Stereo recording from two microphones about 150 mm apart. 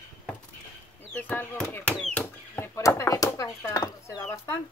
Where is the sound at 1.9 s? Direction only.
5° left (ahead or behind).